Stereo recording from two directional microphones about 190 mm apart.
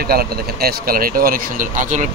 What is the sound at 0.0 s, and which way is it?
Speech, 55° right (ahead or behind).